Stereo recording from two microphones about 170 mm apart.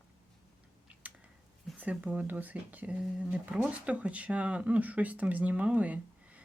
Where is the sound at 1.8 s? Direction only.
10° right (ahead or behind).